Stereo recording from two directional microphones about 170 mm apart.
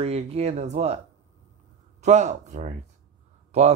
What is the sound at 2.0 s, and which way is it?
Speech, 40° right (ahead or behind).